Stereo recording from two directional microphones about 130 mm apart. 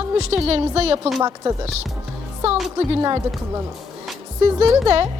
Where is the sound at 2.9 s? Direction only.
40° right (ahead or behind).